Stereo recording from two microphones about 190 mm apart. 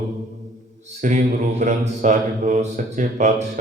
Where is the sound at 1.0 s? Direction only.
40° right (ahead or behind).